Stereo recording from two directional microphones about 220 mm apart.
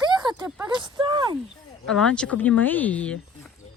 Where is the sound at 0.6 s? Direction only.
20° right (ahead or behind).